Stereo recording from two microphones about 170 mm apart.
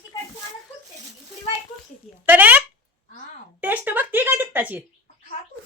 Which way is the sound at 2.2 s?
10° right (ahead or behind).